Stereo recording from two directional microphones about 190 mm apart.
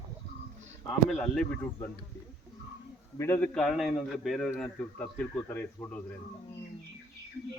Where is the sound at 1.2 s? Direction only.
5° left (ahead or behind).